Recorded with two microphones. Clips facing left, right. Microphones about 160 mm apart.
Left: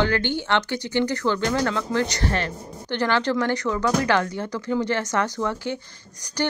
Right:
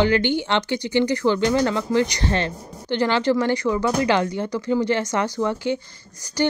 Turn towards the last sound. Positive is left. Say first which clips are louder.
# right 4 dB
turn(degrees=-15)  # may be behind; listen again after turning